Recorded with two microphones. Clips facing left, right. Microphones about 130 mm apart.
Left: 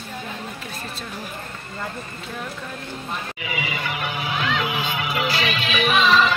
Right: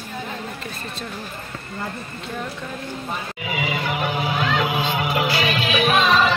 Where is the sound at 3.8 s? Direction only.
45° right (ahead or behind).